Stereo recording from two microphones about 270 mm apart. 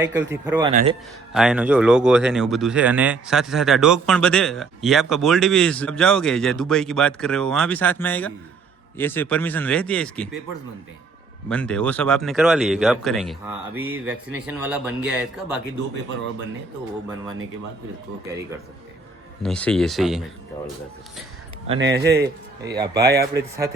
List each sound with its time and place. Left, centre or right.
0.0 s speech: centre
0.7 s speech: right
1.3 s speech: centre
11.4 s speech: centre
19.4 s speech: centre
21.8 s a man's voice: right
22.7 s speech: centre